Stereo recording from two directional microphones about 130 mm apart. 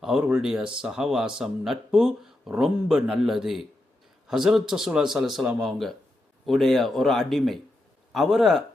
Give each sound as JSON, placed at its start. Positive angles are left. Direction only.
{"t": 0.2, "sound": "speech", "side_deg": -10}